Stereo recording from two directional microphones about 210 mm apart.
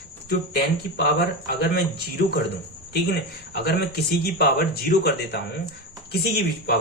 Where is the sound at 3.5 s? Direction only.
50° left (ahead or behind).